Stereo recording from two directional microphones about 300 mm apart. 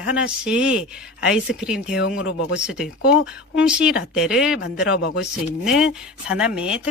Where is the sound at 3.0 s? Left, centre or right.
Left.